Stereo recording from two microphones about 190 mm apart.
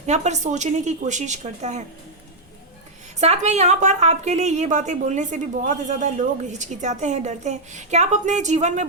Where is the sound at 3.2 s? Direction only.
35° right (ahead or behind).